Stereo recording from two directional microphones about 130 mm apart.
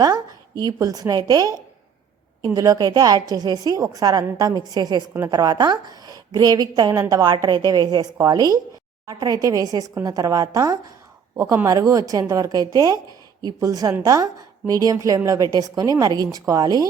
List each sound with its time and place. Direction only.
0.0 s a woman's voice: 30° right (ahead or behind)